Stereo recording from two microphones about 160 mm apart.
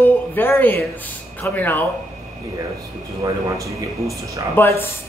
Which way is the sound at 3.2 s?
20° right (ahead or behind).